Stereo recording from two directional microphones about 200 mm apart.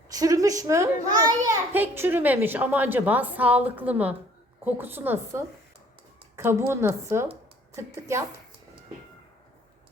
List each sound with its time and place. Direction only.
0.1 s a child's voice: 20° right (ahead or behind)